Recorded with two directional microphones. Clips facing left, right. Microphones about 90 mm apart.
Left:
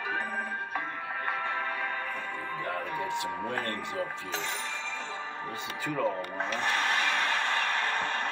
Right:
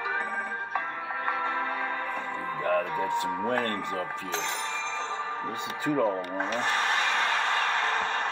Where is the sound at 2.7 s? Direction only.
55° right (ahead or behind).